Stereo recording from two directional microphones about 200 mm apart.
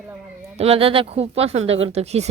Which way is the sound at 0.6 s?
30° right (ahead or behind).